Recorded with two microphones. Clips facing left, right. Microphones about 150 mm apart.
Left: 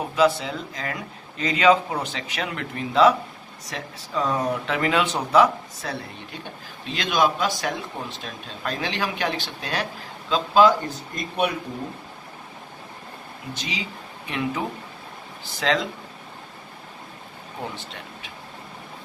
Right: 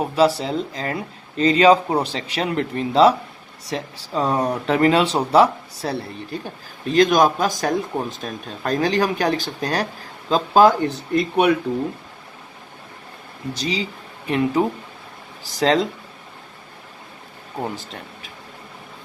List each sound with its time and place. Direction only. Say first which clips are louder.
0.2 s a man's voice: right 2 dB; 35° right (ahead or behind)
10.8 s speech: right 11 dB; 65° right (ahead or behind)
13.5 s speech: right 8 dB; 35° right (ahead or behind)